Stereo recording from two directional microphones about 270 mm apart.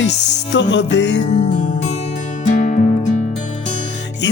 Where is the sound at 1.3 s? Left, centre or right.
Left.